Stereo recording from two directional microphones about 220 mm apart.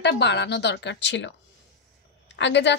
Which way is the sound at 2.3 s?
55° left (ahead or behind).